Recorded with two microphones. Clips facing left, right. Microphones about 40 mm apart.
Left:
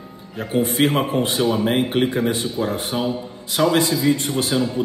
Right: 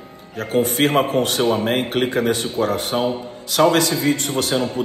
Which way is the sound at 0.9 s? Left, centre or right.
Right.